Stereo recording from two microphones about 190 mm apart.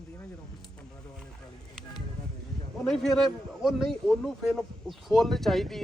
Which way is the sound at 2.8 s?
Centre (ahead or behind).